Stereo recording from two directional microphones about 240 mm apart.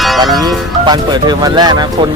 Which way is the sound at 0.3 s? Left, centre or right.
Centre.